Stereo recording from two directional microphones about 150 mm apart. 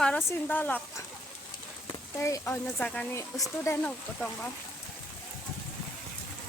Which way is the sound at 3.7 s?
20° left (ahead or behind).